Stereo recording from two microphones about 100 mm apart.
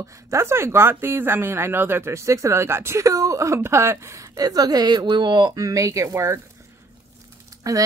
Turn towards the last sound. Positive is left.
turn(degrees=-35)  # may be behind; listen again after turning